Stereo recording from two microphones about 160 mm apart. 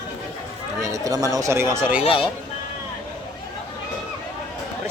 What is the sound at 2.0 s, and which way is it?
Speech, 35° left (ahead or behind).